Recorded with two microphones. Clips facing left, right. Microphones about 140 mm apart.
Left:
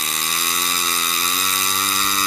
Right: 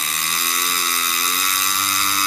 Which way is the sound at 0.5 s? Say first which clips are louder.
Even; centre (ahead or behind).